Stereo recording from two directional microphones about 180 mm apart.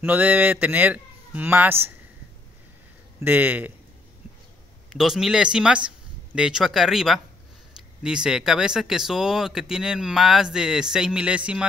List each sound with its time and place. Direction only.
0.0 s a man's voice: 10° right (ahead or behind)
3.3 s a man's voice: 10° right (ahead or behind)
4.8 s speech: centre (ahead or behind)